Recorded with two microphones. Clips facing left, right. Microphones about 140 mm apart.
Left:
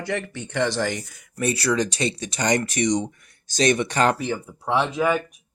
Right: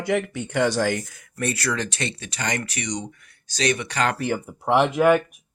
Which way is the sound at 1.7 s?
10° left (ahead or behind).